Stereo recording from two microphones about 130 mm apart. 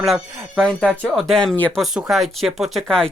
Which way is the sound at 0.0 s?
Centre (ahead or behind).